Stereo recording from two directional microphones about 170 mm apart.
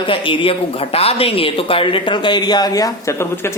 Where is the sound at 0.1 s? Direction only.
30° left (ahead or behind).